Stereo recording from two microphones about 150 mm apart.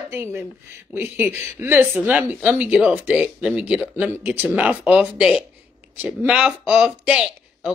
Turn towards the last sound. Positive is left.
turn(degrees=-5)  # may be behind; listen again after turning